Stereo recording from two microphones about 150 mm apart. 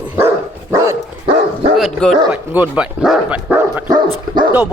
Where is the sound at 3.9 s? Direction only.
30° right (ahead or behind).